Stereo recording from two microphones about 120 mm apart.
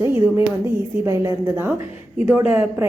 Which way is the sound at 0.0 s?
20° right (ahead or behind).